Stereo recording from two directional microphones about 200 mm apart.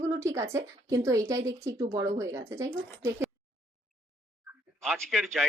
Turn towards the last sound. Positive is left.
turn(degrees=0)  # may be behind; listen again after turning